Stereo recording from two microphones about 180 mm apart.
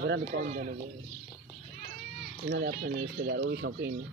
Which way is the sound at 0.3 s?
45° right (ahead or behind).